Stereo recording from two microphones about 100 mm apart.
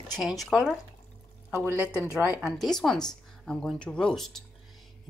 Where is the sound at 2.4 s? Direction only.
Centre (ahead or behind).